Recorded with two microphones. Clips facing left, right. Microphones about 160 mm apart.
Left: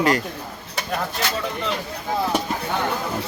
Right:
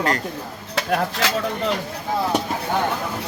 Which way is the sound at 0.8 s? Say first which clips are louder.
Right 4 dB; 90° right.